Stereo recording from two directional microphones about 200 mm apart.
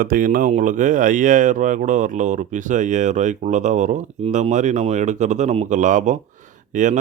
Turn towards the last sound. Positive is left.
turn(degrees=-40)  # may be behind; listen again after turning